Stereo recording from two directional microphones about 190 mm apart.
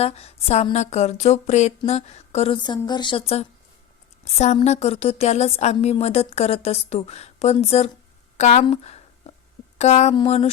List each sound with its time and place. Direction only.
0.0 s a woman's voice: 35° left (ahead or behind)
8.6 s a sound: 35° left (ahead or behind)
9.7 s speech: 35° left (ahead or behind)